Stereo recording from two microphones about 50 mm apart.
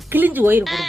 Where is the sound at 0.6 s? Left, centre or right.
Centre.